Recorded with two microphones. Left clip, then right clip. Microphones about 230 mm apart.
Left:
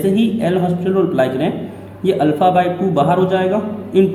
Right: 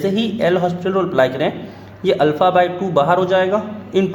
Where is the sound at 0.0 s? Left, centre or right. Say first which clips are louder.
Left 1 dB; right.